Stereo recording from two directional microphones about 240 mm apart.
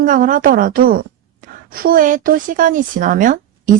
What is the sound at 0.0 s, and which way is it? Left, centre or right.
Speech, right.